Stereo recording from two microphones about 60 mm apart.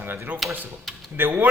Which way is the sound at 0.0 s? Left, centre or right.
Right.